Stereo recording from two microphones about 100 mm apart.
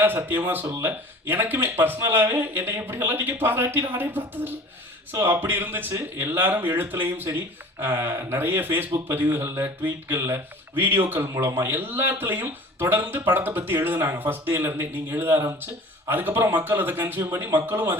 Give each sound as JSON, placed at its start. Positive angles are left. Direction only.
{"t": 0.0, "sound": "speech", "side_deg": -20}